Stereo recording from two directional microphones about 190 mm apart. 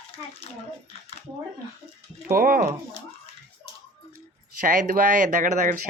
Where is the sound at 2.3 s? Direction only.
50° right (ahead or behind).